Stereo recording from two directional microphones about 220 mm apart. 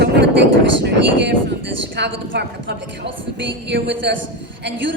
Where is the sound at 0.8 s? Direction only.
50° right (ahead or behind).